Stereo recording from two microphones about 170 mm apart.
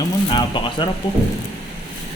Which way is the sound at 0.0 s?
30° left (ahead or behind).